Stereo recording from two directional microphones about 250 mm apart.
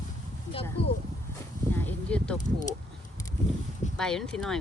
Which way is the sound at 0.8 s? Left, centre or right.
Left.